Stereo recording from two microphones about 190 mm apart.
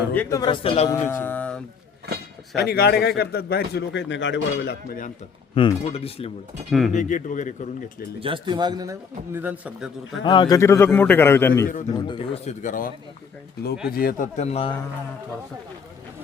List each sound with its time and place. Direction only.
0.1 s a man's voice: 15° left (ahead or behind); by 0.9 s 30° left (ahead or behind)
0.9 s speech: 15° left (ahead or behind)
2.6 s speech: 55° left (ahead or behind)
5.5 s speech: 30° left (ahead or behind)
6.7 s speech: centre (ahead or behind)
6.9 s speech: 40° left (ahead or behind)
8.2 s speech: 25° right (ahead or behind); by 10.2 s 5° right (ahead or behind)
10.2 s a man's voice: 25° left (ahead or behind)
11.9 s speech: 25° left (ahead or behind); by 12.9 s 45° left (ahead or behind)
13.9 s a man's voice: 50° left (ahead or behind); by 14.7 s 35° left (ahead or behind)